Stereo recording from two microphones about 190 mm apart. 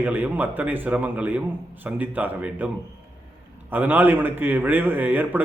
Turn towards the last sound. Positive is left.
turn(degrees=-10)  # may be behind; listen again after turning